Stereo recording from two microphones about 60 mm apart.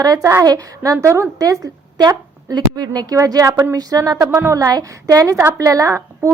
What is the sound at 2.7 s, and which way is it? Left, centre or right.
Speech, right.